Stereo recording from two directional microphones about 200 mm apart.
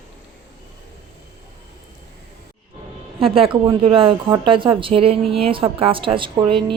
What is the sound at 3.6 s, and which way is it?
A woman's voice, 25° right (ahead or behind).